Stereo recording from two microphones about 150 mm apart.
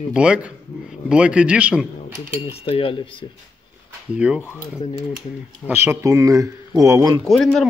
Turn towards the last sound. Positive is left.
turn(degrees=0)  # may be behind; listen again after turning